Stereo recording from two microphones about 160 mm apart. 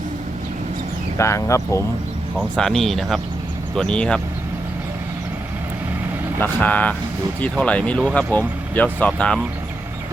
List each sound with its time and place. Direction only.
1.2 s speech: 20° left (ahead or behind)
2.6 s speech: 5° left (ahead or behind)
6.4 s speech: 10° left (ahead or behind)